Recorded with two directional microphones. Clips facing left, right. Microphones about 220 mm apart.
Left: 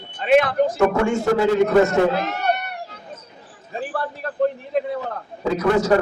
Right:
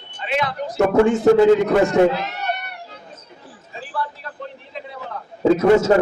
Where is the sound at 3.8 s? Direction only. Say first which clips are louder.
Left 2 dB; 50° left (ahead or behind).